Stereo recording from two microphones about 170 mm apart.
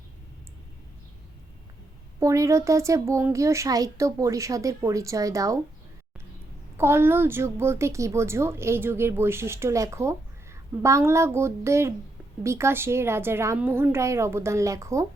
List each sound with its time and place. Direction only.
2.2 s speech: 20° right (ahead or behind)
6.7 s a woman's voice: 15° right (ahead or behind)